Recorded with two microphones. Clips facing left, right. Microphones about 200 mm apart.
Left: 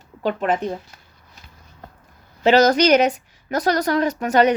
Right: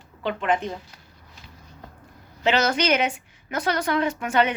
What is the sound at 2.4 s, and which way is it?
A woman's voice, 40° left (ahead or behind).